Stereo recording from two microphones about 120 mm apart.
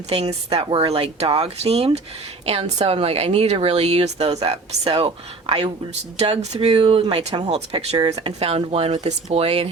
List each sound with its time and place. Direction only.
0.1 s a woman's voice: 55° right (ahead or behind)
6.7 s speech: 50° right (ahead or behind)
7.5 s a woman's voice: 60° right (ahead or behind)
7.9 s speech: 35° right (ahead or behind)
8.2 s a woman's voice: 55° right (ahead or behind)